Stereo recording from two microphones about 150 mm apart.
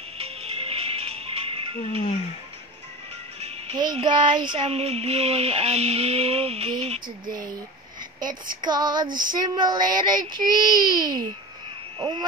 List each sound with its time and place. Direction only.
0.2 s music: 40° right (ahead or behind)
3.3 s music: 45° right (ahead or behind)
3.7 s speech: 30° right (ahead or behind)
7.2 s speech: 25° right (ahead or behind)
8.2 s speech: 65° right (ahead or behind)
8.5 s speech: 30° right (ahead or behind)